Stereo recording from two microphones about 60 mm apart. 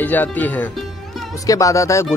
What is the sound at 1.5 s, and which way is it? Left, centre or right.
Speech, left.